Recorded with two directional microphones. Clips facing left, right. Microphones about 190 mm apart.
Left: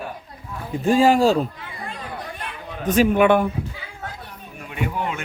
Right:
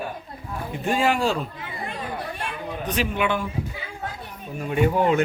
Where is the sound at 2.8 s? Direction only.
45° left (ahead or behind).